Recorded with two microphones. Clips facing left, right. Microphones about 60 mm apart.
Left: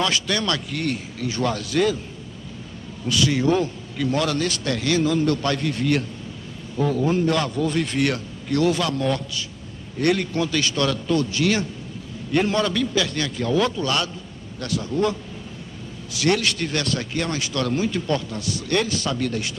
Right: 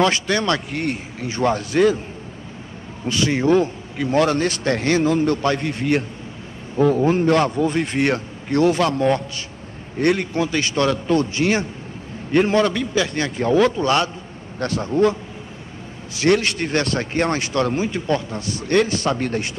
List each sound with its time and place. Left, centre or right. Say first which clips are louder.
0.0 s a man's voice: right 5 dB; right
3.1 s a man's voice: right 3 dB; right
16.2 s a man's voice: right 4 dB; right
17.6 s a man's voice: even; right